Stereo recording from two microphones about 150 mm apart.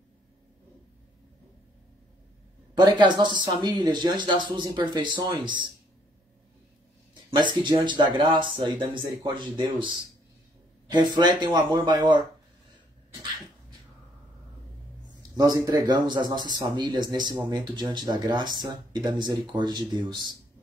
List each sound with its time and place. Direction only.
2.7 s speech: 30° right (ahead or behind)
7.5 s speech: 30° right (ahead or behind)
15.3 s speech: 25° right (ahead or behind)